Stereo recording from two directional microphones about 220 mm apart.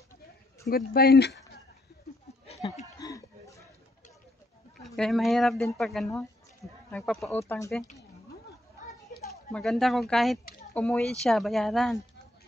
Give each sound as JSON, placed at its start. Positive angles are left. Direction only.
{"t": 0.7, "sound": "speech", "side_deg": 45}
{"t": 3.0, "sound": "a sound", "side_deg": 15}
{"t": 4.8, "sound": "speech", "side_deg": 0}
{"t": 7.4, "sound": "speech", "side_deg": 10}
{"t": 9.1, "sound": "a sound", "side_deg": 40}
{"t": 9.5, "sound": "speech", "side_deg": 0}